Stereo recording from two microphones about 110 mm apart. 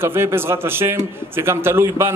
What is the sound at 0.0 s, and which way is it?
A man's voice, 20° right (ahead or behind).